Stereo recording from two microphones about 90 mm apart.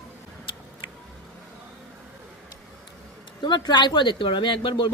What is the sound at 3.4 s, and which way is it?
Speech, 50° left (ahead or behind).